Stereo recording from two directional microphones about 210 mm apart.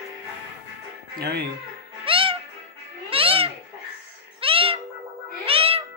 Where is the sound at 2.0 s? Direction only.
25° right (ahead or behind).